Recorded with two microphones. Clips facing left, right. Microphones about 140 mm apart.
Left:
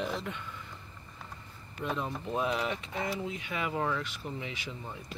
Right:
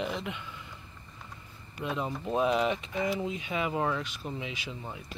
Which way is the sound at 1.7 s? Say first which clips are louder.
Right 1 dB; 10° right (ahead or behind).